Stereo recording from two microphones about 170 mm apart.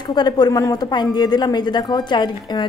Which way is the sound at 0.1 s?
25° left (ahead or behind).